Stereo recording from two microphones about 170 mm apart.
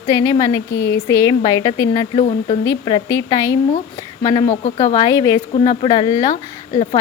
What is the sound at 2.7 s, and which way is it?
Speech, 20° left (ahead or behind).